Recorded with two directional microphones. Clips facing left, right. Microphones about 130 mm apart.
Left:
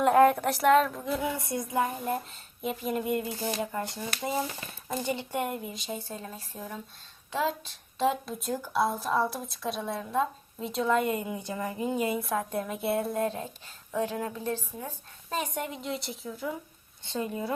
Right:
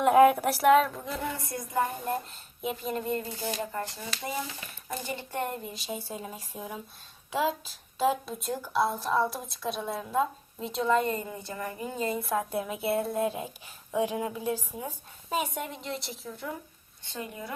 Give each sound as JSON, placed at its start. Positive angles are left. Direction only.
{"t": 0.0, "sound": "speech", "side_deg": -5}
{"t": 1.4, "sound": "a woman's voice", "side_deg": 20}
{"t": 2.0, "sound": "speech", "side_deg": 0}
{"t": 5.6, "sound": "speech", "side_deg": 0}
{"t": 12.2, "sound": "speech", "side_deg": 0}
{"t": 17.0, "sound": "a woman's voice", "side_deg": 25}